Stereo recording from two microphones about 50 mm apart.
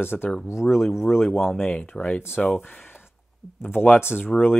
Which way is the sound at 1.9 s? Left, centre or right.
Left.